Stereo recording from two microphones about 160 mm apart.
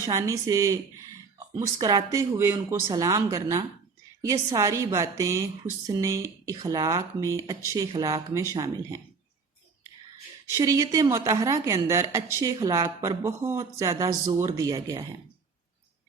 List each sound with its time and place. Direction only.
0.0 s a woman's voice: 20° right (ahead or behind)
10.5 s a woman's voice: 20° right (ahead or behind)